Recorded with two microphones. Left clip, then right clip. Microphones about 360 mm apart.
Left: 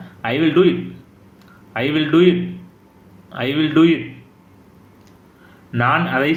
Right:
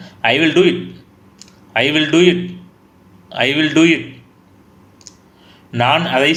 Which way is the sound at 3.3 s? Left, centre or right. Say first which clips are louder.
Right 5 dB; centre.